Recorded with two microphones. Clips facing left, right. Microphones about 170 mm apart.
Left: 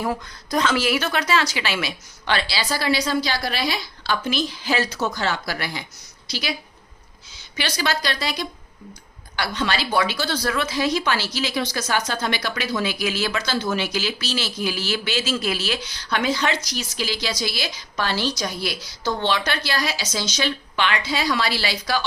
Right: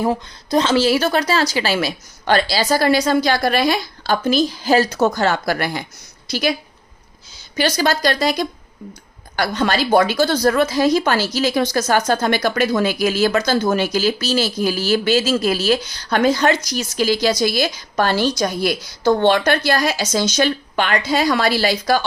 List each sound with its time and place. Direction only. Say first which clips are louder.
0.0 s a woman's voice: right 6 dB; 25° right (ahead or behind); by 22.0 s 45° right (ahead or behind)